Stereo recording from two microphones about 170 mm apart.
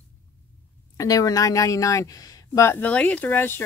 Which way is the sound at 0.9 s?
20° left (ahead or behind).